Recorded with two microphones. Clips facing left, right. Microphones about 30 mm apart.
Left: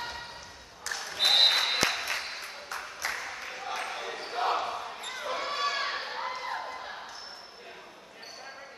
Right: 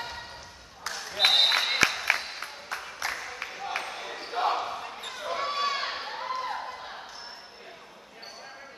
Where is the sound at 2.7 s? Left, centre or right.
Centre.